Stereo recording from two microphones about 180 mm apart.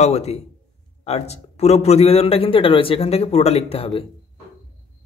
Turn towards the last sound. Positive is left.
turn(degrees=30)  # may be behind; listen again after turning